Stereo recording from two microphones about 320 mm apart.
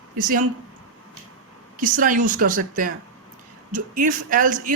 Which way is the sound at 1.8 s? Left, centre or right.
Right.